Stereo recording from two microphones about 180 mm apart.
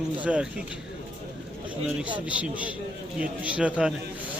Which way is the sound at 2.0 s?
5° right (ahead or behind).